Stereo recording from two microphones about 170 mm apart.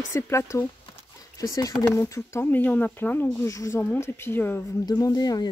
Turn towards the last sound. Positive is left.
turn(degrees=25)  # may be behind; listen again after turning